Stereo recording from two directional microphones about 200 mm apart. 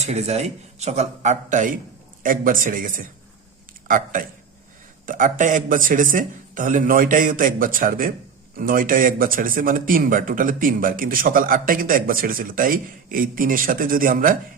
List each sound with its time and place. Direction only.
0.0 s a man's voice: 35° right (ahead or behind)